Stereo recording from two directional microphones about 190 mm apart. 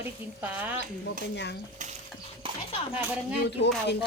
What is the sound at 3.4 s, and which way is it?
Speech, 60° left (ahead or behind).